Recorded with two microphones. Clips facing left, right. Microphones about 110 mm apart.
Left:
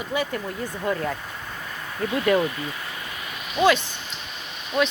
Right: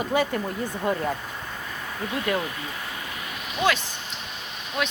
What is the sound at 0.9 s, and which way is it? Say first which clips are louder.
Speech: even; 25° right (ahead or behind).